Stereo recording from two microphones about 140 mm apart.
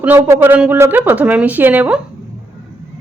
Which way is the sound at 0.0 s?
15° right (ahead or behind).